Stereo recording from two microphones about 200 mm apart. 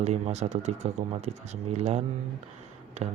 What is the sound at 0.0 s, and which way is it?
Speech, 35° right (ahead or behind).